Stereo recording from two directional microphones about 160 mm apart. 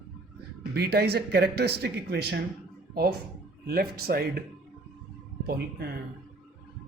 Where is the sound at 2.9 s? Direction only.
80° right.